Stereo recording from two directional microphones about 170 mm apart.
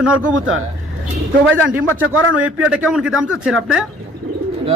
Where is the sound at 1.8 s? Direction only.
10° right (ahead or behind).